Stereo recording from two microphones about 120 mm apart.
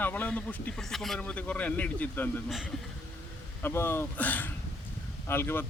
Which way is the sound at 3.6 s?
20° left (ahead or behind).